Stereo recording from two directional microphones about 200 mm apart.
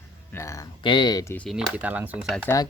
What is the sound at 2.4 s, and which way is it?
Speech, 15° left (ahead or behind).